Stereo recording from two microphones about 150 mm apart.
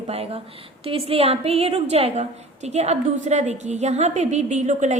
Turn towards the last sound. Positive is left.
turn(degrees=-50)  # may be behind; listen again after turning